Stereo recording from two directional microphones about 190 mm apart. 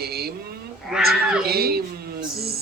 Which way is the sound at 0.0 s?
55° right (ahead or behind).